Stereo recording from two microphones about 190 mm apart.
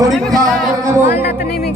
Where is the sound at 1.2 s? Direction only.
50° left (ahead or behind).